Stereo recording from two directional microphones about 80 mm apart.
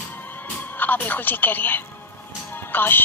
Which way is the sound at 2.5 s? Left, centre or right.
Left.